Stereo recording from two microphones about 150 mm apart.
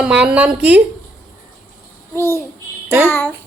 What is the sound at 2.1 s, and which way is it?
A child's voice, 15° left (ahead or behind).